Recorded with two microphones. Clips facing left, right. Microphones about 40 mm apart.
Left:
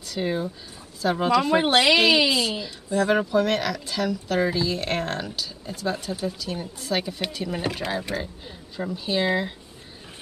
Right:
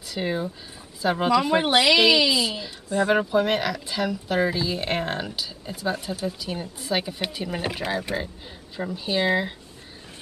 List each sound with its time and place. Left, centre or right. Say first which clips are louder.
0.1 s speech: left 1 dB; centre
2.0 s speech: even; centre
2.9 s speech: even; centre